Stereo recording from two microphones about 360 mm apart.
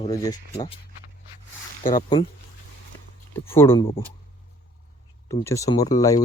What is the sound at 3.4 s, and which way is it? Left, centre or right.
Speech, centre.